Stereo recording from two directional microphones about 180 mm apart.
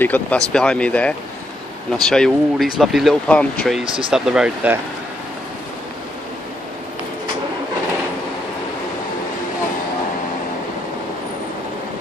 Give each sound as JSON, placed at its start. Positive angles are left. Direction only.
{"t": 0.0, "sound": "speech", "side_deg": 10}
{"t": 3.8, "sound": "speech", "side_deg": -30}
{"t": 4.1, "sound": "speech", "side_deg": -5}